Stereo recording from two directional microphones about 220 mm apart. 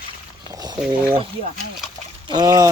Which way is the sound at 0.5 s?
15° right (ahead or behind).